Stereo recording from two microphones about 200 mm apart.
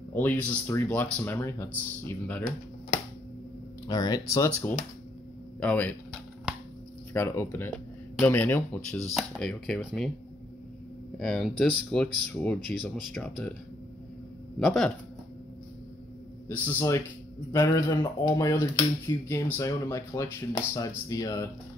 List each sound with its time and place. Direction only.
0.1 s speech: 10° left (ahead or behind)
3.8 s speech: 20° left (ahead or behind)
7.2 s speech: 10° left (ahead or behind)
11.1 s speech: centre (ahead or behind)
14.6 s speech: centre (ahead or behind)
16.4 s speech: 10° left (ahead or behind)